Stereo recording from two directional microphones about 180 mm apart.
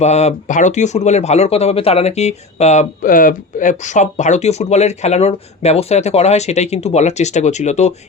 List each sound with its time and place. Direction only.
0.0 s speech: 40° left (ahead or behind)